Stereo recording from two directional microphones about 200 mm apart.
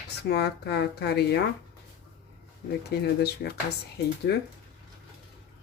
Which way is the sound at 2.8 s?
55° left (ahead or behind).